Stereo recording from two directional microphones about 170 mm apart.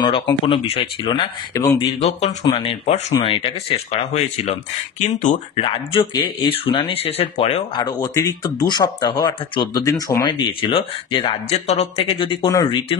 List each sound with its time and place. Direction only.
0.0 s speech: 30° left (ahead or behind)
1.5 s speech: 20° left (ahead or behind)
2.0 s speech: 40° left (ahead or behind)
5.6 s speech: 30° left (ahead or behind)
7.8 s speech: 20° left (ahead or behind)